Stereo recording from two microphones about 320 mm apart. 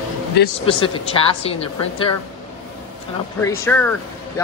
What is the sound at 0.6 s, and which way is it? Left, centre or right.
Speech, centre.